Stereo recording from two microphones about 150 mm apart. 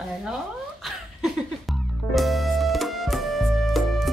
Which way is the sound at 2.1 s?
Centre (ahead or behind).